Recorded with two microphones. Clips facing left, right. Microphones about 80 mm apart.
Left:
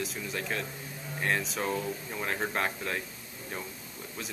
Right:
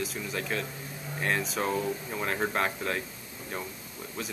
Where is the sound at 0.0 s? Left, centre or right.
Centre.